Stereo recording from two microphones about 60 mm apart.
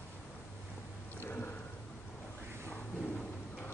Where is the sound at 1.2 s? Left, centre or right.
Left.